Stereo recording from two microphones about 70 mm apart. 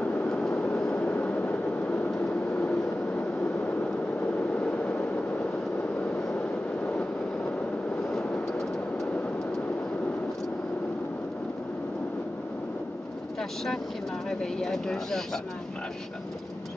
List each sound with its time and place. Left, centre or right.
0.0 s vehicle: left
0.3 s vehicle: centre
8.1 s vehicle: centre
14.4 s speech: centre